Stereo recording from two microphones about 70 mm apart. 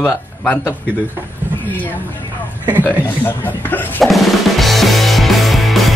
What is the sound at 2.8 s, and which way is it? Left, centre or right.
Speech, left.